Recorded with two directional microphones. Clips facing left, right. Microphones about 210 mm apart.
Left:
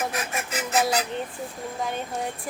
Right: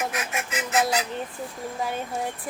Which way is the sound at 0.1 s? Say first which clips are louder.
Even; 35° left (ahead or behind).